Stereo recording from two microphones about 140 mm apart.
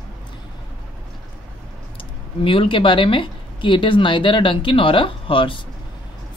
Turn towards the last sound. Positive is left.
turn(degrees=40)  # may be behind; listen again after turning